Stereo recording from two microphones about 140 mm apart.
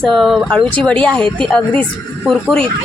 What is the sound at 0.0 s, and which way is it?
Speech, centre (ahead or behind).